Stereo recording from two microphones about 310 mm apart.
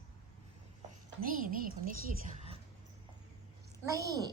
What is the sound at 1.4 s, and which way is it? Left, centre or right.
Speech, right.